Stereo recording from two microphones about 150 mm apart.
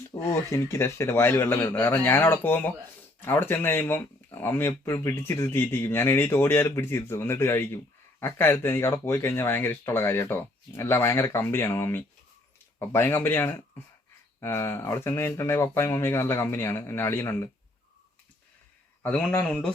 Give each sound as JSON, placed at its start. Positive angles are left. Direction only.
{"t": 0.1, "sound": "speech", "side_deg": 20}
{"t": 19.0, "sound": "speech", "side_deg": 10}